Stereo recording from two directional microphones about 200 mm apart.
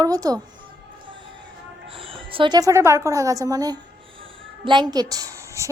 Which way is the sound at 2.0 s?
25° right (ahead or behind).